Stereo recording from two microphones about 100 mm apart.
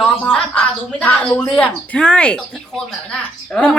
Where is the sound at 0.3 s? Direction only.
10° left (ahead or behind).